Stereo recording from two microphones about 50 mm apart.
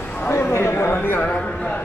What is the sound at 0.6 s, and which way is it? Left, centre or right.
Chatter, left.